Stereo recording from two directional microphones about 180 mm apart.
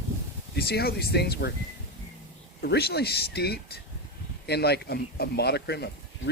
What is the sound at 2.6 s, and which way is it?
Speech, 60° left (ahead or behind).